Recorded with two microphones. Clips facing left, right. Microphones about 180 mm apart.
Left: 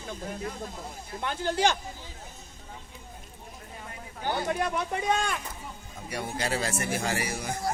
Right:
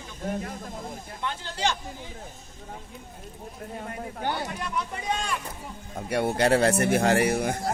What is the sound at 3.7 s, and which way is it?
Speech, 50° right (ahead or behind).